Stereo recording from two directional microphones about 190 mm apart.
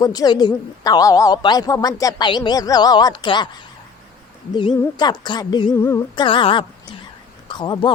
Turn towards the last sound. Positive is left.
turn(degrees=25)  # may be behind; listen again after turning